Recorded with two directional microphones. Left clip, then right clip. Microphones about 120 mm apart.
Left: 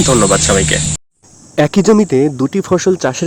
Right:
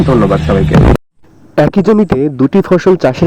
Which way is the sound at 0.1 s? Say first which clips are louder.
Even; 65° left (ahead or behind).